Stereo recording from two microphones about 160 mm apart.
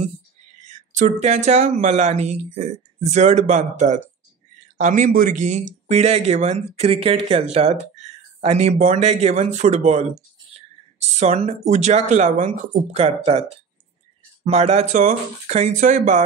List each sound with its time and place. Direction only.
0.9 s speech: 50° right (ahead or behind)